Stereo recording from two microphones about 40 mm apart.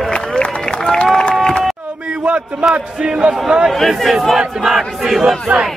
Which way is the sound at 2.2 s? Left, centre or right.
Right.